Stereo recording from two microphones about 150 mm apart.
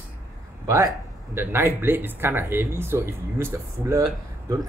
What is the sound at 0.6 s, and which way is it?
Speech, 20° right (ahead or behind).